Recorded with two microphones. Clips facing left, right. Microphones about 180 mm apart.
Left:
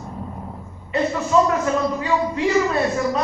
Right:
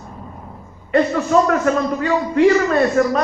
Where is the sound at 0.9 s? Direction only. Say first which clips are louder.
Right 5 dB; 65° right (ahead or behind).